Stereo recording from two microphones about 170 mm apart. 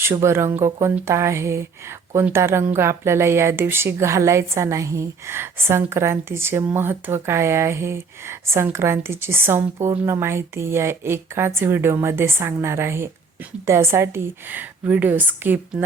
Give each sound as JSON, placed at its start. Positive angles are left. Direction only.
{"t": 0.0, "sound": "speech", "side_deg": -15}